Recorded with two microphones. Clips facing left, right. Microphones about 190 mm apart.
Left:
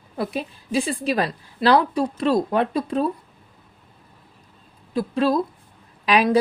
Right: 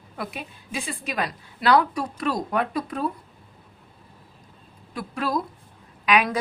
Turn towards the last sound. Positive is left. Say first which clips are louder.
# left 3 dB
turn(degrees=30)  # may be behind; listen again after turning